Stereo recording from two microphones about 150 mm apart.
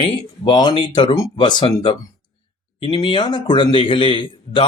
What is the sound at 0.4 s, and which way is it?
Speech, 30° left (ahead or behind).